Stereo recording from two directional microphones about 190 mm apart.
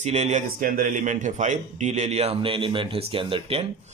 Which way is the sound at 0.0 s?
35° right (ahead or behind).